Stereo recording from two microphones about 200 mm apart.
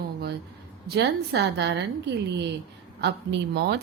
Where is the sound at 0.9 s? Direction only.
55° right (ahead or behind).